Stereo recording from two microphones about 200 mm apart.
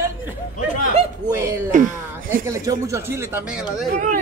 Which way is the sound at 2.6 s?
15° right (ahead or behind).